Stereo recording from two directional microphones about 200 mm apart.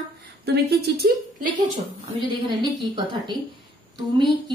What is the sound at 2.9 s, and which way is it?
Speech, 25° right (ahead or behind).